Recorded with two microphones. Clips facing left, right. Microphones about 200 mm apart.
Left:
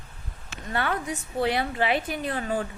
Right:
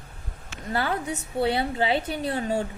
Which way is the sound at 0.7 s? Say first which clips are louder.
Right 1 dB; 30° right (ahead or behind).